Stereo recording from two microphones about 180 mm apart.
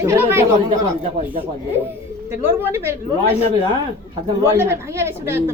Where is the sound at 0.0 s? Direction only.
15° right (ahead or behind).